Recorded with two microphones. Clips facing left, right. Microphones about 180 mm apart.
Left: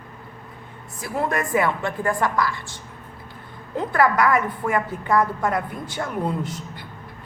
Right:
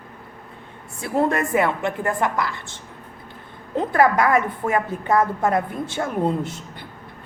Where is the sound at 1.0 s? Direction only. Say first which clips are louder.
Right 4 dB; 25° right (ahead or behind).